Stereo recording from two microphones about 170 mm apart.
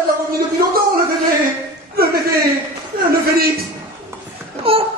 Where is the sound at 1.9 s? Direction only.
65° right (ahead or behind).